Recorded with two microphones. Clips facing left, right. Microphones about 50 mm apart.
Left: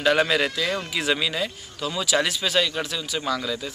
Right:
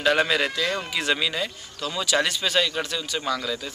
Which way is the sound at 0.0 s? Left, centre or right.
Centre.